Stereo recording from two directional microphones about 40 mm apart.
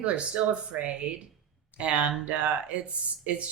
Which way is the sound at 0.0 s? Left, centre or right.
Right.